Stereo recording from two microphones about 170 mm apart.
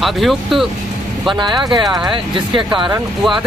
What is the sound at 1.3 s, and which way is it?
Speech, 25° right (ahead or behind).